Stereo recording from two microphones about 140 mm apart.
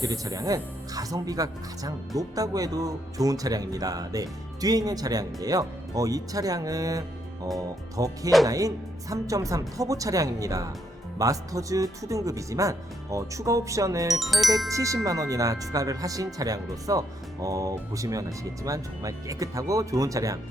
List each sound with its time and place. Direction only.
0.0 s speech: 25° right (ahead or behind)